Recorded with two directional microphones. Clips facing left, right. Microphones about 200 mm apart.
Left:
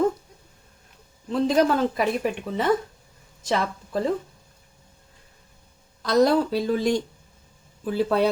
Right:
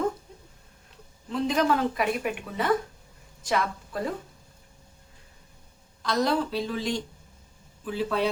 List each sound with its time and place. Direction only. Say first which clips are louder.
1.3 s a woman's voice: left 4 dB; 35° left (ahead or behind)
6.0 s a woman's voice: left 6 dB; 40° left (ahead or behind)